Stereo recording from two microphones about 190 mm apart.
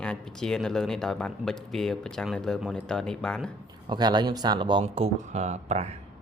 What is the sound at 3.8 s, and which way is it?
A man's voice, 25° right (ahead or behind).